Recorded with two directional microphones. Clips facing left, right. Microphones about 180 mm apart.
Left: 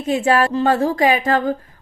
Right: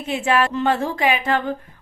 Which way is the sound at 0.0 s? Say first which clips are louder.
Left 3 dB; 40° left (ahead or behind).